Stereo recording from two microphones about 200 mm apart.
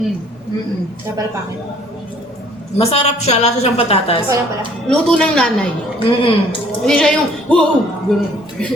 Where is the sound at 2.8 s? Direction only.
30° left (ahead or behind).